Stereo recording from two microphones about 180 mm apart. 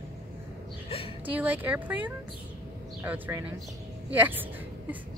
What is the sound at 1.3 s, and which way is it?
Speech, 10° right (ahead or behind).